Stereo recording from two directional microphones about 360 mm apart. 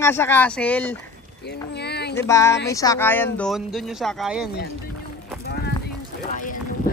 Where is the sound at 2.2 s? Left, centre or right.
Centre.